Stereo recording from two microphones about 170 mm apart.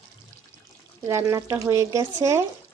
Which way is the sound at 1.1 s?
20° right (ahead or behind).